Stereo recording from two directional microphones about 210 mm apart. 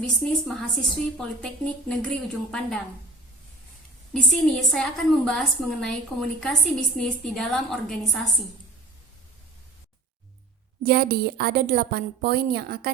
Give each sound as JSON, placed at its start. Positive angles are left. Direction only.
{"t": 0.0, "sound": "a woman's voice", "side_deg": 0}
{"t": 4.1, "sound": "a woman's voice", "side_deg": 0}
{"t": 10.8, "sound": "a woman's voice", "side_deg": -45}